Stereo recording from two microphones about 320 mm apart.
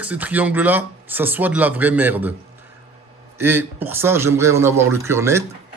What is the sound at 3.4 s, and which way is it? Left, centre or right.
A man's voice, centre.